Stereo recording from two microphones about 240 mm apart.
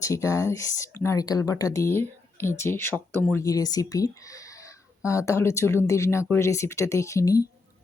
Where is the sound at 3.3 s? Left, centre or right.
Centre.